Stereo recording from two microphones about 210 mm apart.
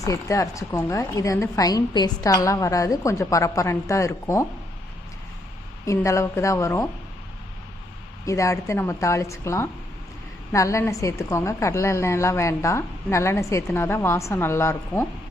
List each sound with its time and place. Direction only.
0.0 s speech: 15° left (ahead or behind)
5.8 s speech: 15° left (ahead or behind)
8.2 s speech: 15° left (ahead or behind)